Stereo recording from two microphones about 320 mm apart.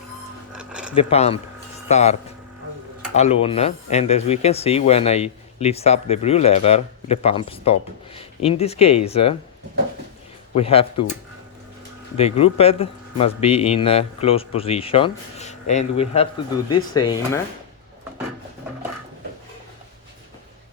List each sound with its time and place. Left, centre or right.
0.5 s a sound: centre
0.9 s speech: centre
3.2 s speech: centre
10.5 s speech: centre
12.1 s speech: centre